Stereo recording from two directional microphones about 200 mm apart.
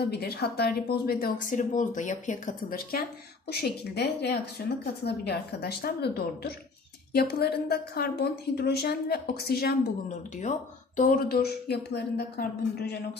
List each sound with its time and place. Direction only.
0.1 s speech: 50° left (ahead or behind)